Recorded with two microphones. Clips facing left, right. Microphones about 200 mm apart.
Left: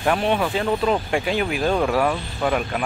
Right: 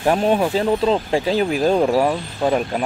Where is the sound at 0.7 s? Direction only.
25° right (ahead or behind).